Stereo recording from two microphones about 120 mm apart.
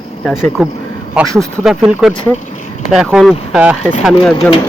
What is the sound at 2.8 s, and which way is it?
Speech, 5° right (ahead or behind).